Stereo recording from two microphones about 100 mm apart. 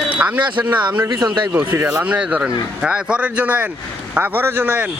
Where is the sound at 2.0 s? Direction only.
10° right (ahead or behind).